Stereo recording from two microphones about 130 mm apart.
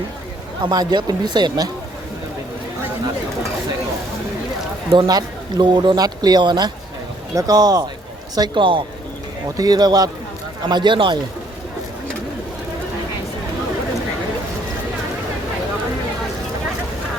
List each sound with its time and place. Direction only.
0.6 s speech: 30° right (ahead or behind)
4.9 s a man's voice: 30° right (ahead or behind)